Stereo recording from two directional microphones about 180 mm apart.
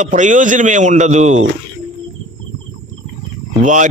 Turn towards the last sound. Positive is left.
turn(degrees=-45)  # may be behind; listen again after turning